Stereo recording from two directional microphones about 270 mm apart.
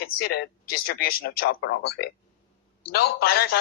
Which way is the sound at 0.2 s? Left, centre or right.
Left.